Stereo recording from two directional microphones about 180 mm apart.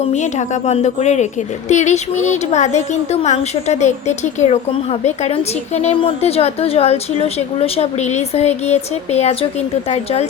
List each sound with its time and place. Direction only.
0.1 s a woman's voice: 40° left (ahead or behind)